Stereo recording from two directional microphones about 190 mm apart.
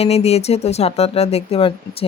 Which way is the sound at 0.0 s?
35° left (ahead or behind).